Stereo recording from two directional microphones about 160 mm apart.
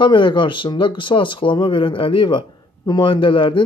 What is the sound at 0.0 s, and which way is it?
Speech, 30° left (ahead or behind).